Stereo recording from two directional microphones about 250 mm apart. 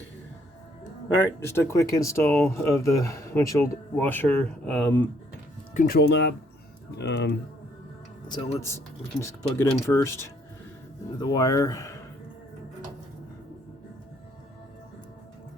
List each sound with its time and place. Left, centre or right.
1.4 s speech: centre
5.7 s speech: left
6.0 s speech: left
8.3 s speech: centre
11.2 s speech: centre